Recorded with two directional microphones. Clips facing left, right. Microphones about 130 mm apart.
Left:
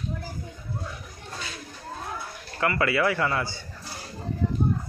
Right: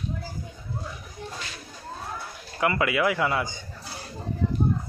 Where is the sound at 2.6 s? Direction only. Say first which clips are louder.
Even; 15° right (ahead or behind).